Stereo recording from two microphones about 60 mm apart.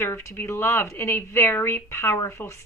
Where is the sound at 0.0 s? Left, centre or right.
Left.